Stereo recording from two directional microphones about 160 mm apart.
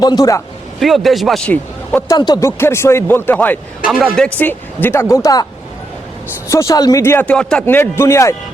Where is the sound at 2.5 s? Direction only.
15° left (ahead or behind).